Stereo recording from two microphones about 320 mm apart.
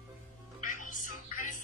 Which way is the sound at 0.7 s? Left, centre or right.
Left.